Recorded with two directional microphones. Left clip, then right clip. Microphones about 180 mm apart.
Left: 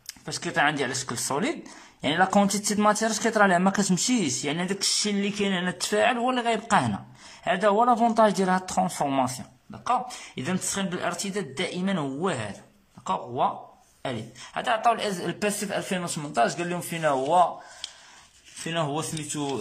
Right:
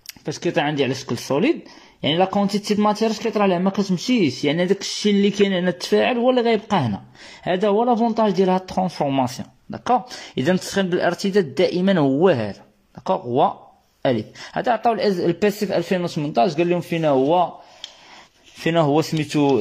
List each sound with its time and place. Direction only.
0.0 s speech: 20° right (ahead or behind); by 4.5 s centre (ahead or behind)
4.5 s speech: 15° right (ahead or behind)
9.7 s speech: 35° right (ahead or behind); by 17.5 s 15° right (ahead or behind)
18.7 s speech: 35° right (ahead or behind)